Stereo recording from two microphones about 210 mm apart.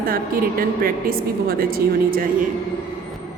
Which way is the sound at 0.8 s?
45° right (ahead or behind).